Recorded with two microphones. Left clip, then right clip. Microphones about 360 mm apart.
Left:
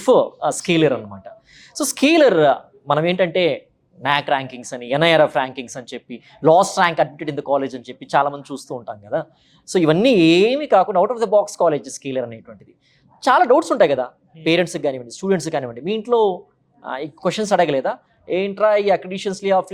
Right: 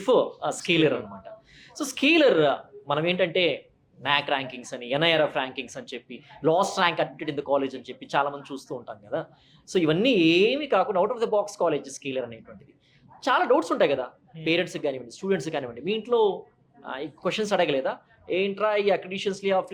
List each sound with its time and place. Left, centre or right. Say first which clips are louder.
0.0 s speech: left 7 dB; left
9.6 s speech: left 7 dB; left
14.4 s speech: left 7 dB; left